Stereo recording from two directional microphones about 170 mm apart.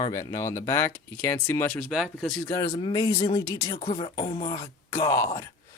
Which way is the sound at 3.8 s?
30° left (ahead or behind).